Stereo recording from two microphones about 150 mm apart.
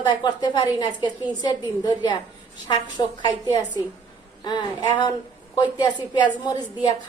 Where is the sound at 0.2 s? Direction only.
30° left (ahead or behind).